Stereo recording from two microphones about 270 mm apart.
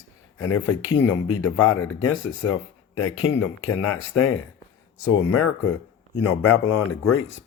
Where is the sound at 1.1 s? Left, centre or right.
Left.